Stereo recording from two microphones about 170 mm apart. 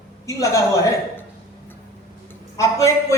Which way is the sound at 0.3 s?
20° left (ahead or behind).